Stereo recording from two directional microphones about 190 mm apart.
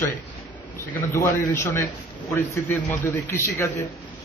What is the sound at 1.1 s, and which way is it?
A man's voice, 15° left (ahead or behind).